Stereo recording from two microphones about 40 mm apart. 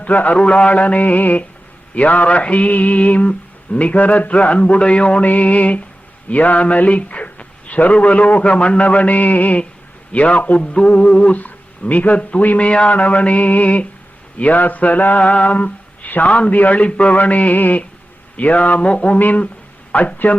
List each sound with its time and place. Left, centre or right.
0.0 s mantra: left
0.3 s mantra: left
4.8 s a sound: left
5.2 s mantra: left
6.2 s a man's voice: left
7.9 s mantra: left
11.3 s speech: left
12.5 s a sound: left
13.0 s mantra: left
19.9 s speech: left